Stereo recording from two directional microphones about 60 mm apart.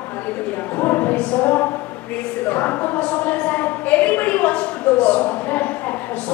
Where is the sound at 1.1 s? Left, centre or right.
Centre.